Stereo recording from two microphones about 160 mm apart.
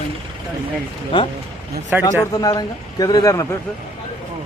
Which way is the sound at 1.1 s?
30° left (ahead or behind).